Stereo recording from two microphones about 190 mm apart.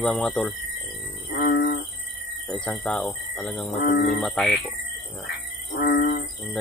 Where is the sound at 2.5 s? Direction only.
10° left (ahead or behind).